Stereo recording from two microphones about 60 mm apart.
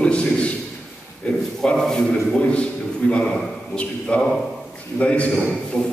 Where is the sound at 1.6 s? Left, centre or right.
Centre.